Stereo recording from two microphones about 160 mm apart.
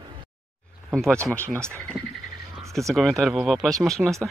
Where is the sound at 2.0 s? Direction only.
5° right (ahead or behind).